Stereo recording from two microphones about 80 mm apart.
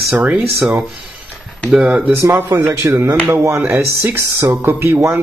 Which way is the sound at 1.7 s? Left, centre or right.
Centre.